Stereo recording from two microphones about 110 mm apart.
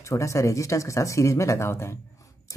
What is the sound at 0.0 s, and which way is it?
Speech, 30° left (ahead or behind).